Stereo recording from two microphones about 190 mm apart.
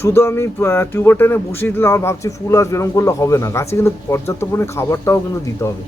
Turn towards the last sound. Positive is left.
turn(degrees=15)  # may be behind; listen again after turning